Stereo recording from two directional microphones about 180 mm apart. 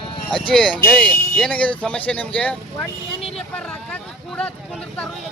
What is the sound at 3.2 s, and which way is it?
Vehicle, 35° left (ahead or behind).